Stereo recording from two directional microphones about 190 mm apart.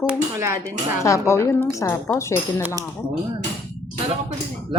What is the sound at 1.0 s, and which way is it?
A woman's voice, 15° left (ahead or behind).